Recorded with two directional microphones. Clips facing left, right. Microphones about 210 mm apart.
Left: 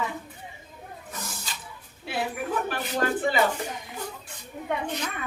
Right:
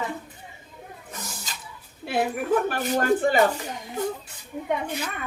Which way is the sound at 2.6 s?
45° right (ahead or behind).